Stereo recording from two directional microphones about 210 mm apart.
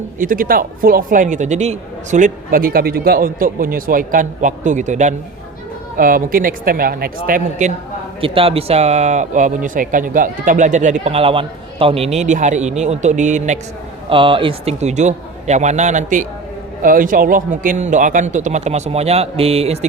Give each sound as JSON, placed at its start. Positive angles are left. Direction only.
{"t": 0.2, "sound": "a man's voice", "side_deg": -40}
{"t": 8.2, "sound": "a man's voice", "side_deg": -25}
{"t": 14.1, "sound": "a man's voice", "side_deg": -25}